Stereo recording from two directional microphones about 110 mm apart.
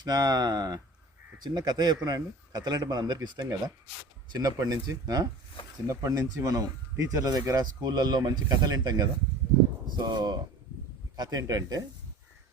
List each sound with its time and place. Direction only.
0.0 s speech: 35° right (ahead or behind)